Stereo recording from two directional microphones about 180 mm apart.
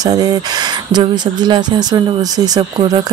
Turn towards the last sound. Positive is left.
turn(degrees=-20)  # may be behind; listen again after turning